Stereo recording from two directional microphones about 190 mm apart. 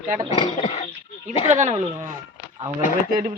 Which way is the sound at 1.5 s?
35° right (ahead or behind).